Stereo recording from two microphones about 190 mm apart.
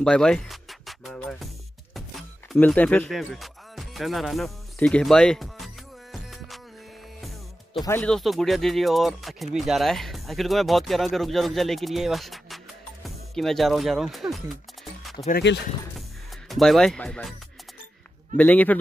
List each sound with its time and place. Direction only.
0.0 s music: 5° left (ahead or behind)
4.8 s speech: 5° left (ahead or behind)
6.1 s music: centre (ahead or behind)
8.0 s speech: centre (ahead or behind)
15.5 s speech: 70° left (ahead or behind)
16.4 s speech: centre (ahead or behind)